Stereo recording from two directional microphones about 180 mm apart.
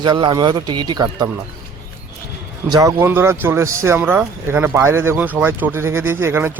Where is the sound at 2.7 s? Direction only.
15° right (ahead or behind).